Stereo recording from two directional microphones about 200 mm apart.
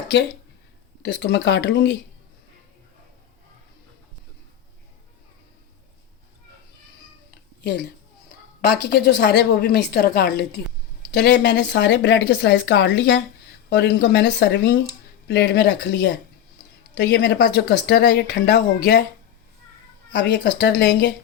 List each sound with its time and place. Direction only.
1.0 s speech: 60° left (ahead or behind)
7.3 s a sound: 55° left (ahead or behind)
8.8 s speech: 55° left (ahead or behind)
20.1 s speech: 60° left (ahead or behind)